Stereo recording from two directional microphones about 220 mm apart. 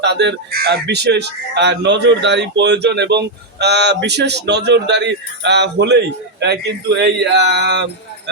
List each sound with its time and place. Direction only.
0.0 s speech: 50° right (ahead or behind)